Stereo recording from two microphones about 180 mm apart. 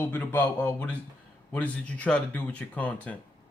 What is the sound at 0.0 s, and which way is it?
Speech, 10° left (ahead or behind).